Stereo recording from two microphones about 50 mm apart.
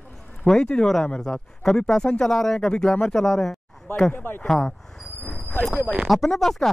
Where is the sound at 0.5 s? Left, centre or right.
Centre.